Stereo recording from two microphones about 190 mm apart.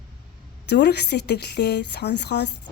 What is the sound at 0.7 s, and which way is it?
A woman's voice, 60° left (ahead or behind).